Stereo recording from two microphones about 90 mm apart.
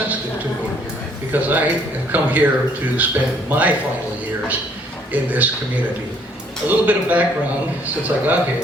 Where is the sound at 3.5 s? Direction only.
15° right (ahead or behind).